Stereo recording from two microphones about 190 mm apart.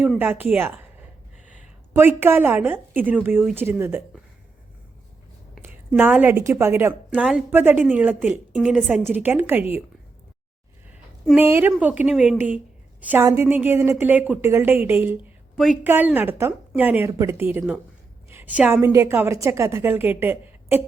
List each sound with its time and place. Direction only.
0.0 s a woman's voice: 10° right (ahead or behind)
2.0 s a woman's voice: 10° right (ahead or behind)
5.5 s a woman's voice: 5° right (ahead or behind)
11.3 s a woman's voice: 10° right (ahead or behind)